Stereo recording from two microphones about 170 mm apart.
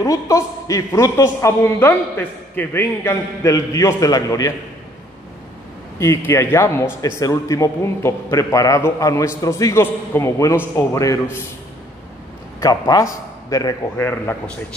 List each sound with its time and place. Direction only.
0.0 s a man's voice: 20° left (ahead or behind)
5.9 s a man's voice: 15° left (ahead or behind)
12.5 s a man's voice: 20° left (ahead or behind)